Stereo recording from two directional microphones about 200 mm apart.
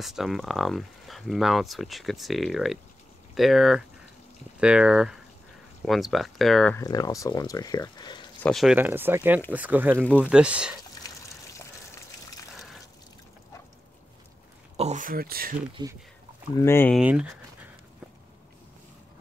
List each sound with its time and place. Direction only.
0.0 s speech: centre (ahead or behind)
6.8 s speech: 20° left (ahead or behind)
8.4 s speech: centre (ahead or behind)
8.7 s speech: 10° right (ahead or behind)
14.8 s speech: 40° right (ahead or behind)
16.5 s speech: 10° left (ahead or behind)
16.9 s speech: 5° right (ahead or behind)